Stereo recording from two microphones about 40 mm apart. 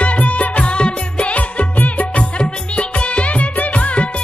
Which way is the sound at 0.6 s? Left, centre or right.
Left.